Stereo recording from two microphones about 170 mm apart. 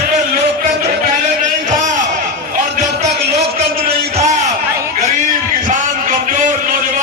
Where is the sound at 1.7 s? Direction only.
45° right (ahead or behind).